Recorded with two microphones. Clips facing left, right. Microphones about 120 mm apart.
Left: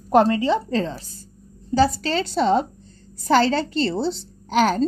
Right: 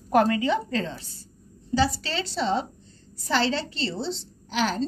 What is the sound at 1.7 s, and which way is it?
A woman's voice, 50° left (ahead or behind).